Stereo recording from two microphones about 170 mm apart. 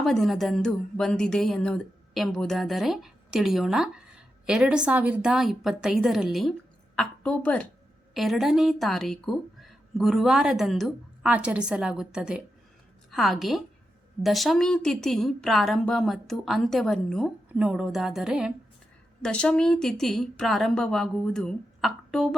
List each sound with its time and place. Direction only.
0.0 s a woman's voice: centre (ahead or behind)